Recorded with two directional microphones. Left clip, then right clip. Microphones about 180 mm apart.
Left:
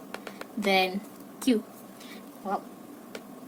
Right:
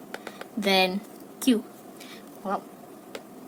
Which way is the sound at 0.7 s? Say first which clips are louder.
Right 2 dB; 40° right (ahead or behind).